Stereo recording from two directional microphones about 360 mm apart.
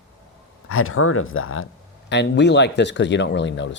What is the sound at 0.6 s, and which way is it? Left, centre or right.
Speech, left.